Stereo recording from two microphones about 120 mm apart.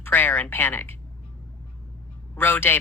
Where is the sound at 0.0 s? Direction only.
15° left (ahead or behind).